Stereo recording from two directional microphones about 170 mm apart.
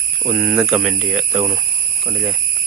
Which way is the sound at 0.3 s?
Centre (ahead or behind).